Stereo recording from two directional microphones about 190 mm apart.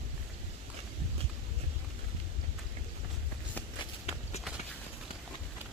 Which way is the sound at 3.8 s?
35° left (ahead or behind).